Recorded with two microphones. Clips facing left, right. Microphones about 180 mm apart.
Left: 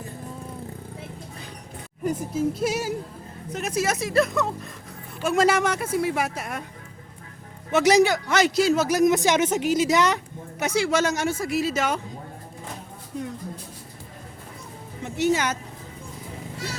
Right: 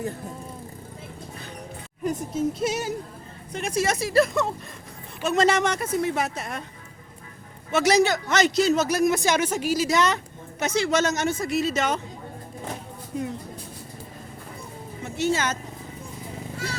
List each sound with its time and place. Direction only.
2.0 s speech: 5° left (ahead or behind)
7.7 s speech: 15° left (ahead or behind)
15.0 s speech: 15° left (ahead or behind)